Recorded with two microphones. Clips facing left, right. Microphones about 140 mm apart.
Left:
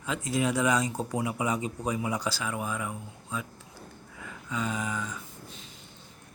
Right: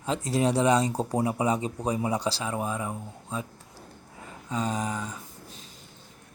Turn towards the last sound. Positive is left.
turn(degrees=-35)  # may be behind; listen again after turning